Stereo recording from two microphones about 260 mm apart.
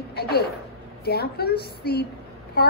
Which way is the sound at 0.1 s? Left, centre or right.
Left.